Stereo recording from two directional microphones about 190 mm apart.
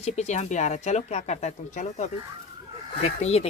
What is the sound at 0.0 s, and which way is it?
Speech, 35° left (ahead or behind).